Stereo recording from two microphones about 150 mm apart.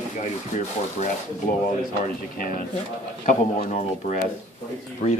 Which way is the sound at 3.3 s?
55° left (ahead or behind).